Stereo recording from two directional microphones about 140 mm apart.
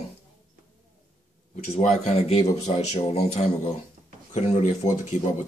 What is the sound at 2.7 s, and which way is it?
A man's voice, 45° left (ahead or behind).